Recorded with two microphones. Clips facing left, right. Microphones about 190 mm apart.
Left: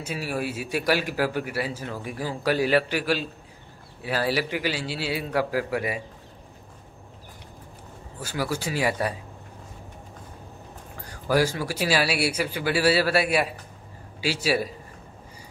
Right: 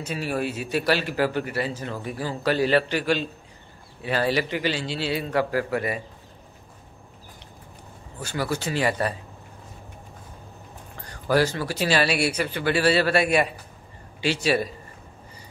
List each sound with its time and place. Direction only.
0.0 s a man's voice: 10° left (ahead or behind)
8.2 s a man's voice: 10° left (ahead or behind)
11.1 s a man's voice: 10° left (ahead or behind)